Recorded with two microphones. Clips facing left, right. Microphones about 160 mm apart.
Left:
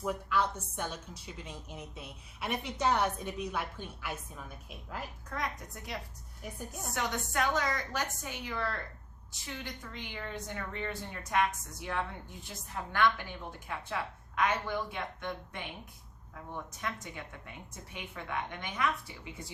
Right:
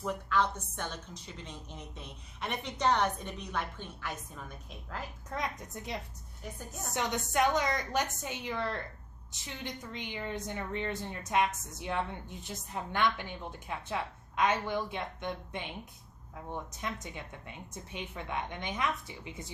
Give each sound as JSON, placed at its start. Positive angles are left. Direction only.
{"t": 0.0, "sound": "a woman's voice", "side_deg": 10}
{"t": 5.3, "sound": "a woman's voice", "side_deg": -20}